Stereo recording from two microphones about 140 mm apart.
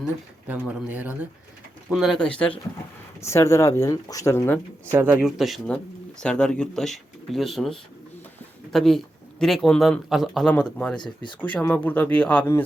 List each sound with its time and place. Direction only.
0.4 s speech: 10° right (ahead or behind); by 2.6 s 10° left (ahead or behind)
3.2 s speech: 20° left (ahead or behind)
4.9 s speech: 15° right (ahead or behind)
5.2 s speech: centre (ahead or behind)
10.9 s speech: 35° left (ahead or behind)
11.3 s speech: 10° left (ahead or behind)